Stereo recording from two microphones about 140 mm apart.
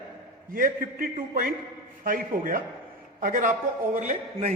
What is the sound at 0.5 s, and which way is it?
A man's voice, 85° right.